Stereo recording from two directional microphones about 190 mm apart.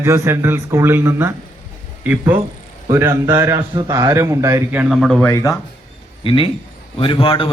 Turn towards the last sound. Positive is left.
turn(degrees=30)  # may be behind; listen again after turning